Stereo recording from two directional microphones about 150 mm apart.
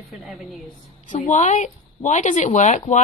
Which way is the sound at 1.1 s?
55° left (ahead or behind).